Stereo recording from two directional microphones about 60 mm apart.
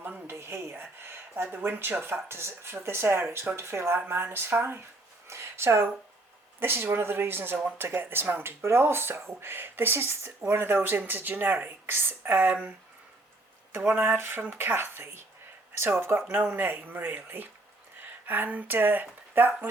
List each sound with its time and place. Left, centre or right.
0.3 s a sound: right
0.7 s speech: right
5.3 s a sound: right
6.6 s speech: right
12.5 s speech: centre
14.0 s speech: right